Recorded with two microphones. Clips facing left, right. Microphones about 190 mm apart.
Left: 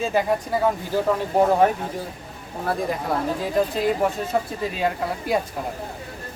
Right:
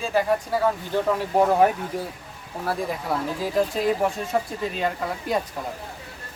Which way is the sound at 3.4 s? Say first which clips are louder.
Even; centre (ahead or behind).